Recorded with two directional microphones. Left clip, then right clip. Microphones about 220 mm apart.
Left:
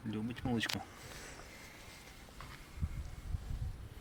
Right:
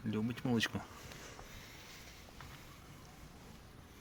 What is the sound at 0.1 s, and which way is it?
Speech, 30° right (ahead or behind).